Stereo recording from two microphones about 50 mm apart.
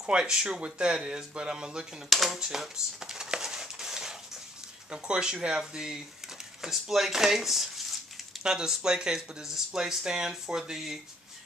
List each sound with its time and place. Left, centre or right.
0.2 s speech: centre
2.0 s a sound: centre
4.9 s speech: centre
8.5 s speech: centre